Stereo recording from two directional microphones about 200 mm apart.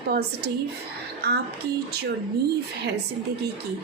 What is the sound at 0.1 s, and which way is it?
A woman's voice, 55° right (ahead or behind).